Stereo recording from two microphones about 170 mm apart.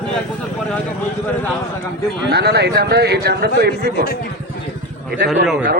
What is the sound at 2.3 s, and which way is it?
Speech, 80° right.